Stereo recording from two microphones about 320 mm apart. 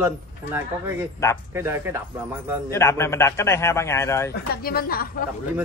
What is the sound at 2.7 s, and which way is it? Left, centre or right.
A man's voice, centre.